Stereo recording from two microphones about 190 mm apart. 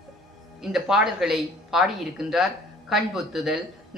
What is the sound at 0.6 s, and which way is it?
Speech, centre (ahead or behind).